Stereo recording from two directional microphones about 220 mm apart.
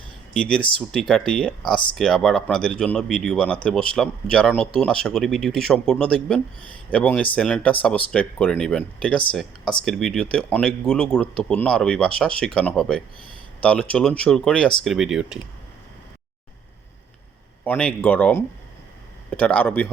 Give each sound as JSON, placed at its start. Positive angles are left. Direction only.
{"t": 0.3, "sound": "speech", "side_deg": 5}
{"t": 17.7, "sound": "speech", "side_deg": 5}